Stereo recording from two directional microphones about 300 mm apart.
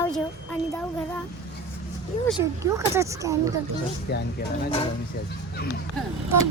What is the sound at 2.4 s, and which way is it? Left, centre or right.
Speech, centre.